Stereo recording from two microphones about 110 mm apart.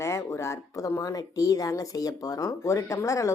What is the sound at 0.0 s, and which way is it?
Speech, 25° left (ahead or behind).